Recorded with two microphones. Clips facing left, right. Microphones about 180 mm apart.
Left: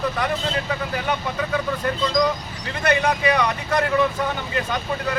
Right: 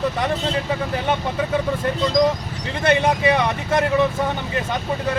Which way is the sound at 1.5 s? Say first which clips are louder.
Right 2 dB; 25° right (ahead or behind).